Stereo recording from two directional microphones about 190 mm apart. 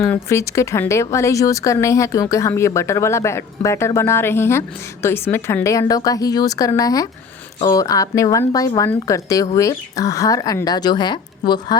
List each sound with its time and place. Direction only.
0.0 s speech: 15° left (ahead or behind)